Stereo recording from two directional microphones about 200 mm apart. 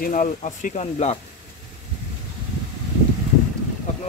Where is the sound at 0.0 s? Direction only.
40° left (ahead or behind).